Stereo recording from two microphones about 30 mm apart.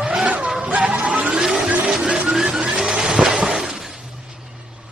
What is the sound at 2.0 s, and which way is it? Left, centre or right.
Music, right.